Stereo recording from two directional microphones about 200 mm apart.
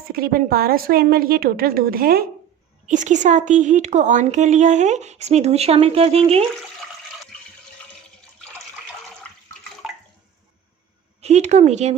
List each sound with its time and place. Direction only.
0.1 s a woman's voice: 50° right (ahead or behind); by 6.4 s 30° right (ahead or behind)
11.2 s a woman's voice: 35° right (ahead or behind)